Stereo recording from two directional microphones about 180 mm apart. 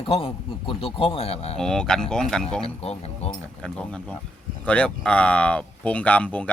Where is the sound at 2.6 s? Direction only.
35° left (ahead or behind).